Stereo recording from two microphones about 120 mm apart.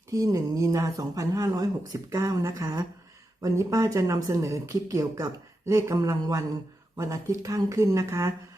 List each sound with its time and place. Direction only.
0.1 s speech: 25° right (ahead or behind)